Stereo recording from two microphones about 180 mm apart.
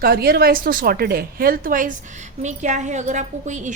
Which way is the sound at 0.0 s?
60° right (ahead or behind).